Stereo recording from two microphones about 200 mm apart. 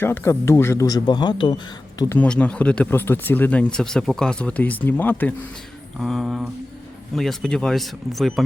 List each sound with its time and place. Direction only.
0.0 s speech: 10° left (ahead or behind)
2.0 s speech: 10° left (ahead or behind)